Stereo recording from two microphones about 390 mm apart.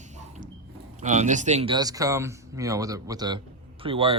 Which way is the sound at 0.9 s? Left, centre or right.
Centre.